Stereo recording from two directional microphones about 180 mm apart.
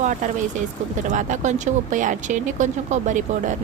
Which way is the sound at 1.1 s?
40° right (ahead or behind).